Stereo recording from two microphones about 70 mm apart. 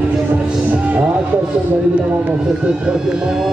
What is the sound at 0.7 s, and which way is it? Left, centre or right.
Music, centre.